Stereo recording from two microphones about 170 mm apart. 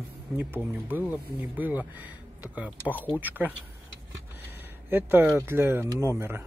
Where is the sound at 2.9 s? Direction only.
10° left (ahead or behind).